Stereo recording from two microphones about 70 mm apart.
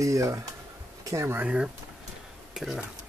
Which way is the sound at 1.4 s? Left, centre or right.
Centre.